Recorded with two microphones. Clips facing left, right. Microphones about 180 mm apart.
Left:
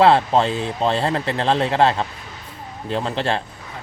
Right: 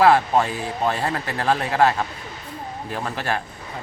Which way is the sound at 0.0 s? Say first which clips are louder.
Left 2 dB; 25° left (ahead or behind).